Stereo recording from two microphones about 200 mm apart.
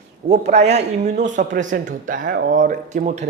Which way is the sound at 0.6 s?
60° right (ahead or behind).